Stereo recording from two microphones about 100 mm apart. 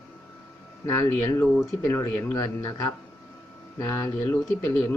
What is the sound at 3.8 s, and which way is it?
Speech, 30° left (ahead or behind).